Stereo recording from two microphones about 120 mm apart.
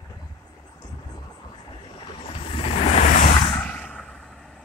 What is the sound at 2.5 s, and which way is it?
Vehicle, 55° left (ahead or behind).